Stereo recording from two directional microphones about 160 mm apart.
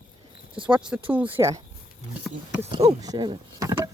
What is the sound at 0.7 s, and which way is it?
Speech, 5° right (ahead or behind).